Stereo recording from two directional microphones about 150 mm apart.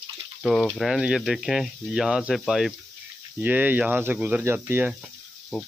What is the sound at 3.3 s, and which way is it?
Speech, 10° right (ahead or behind).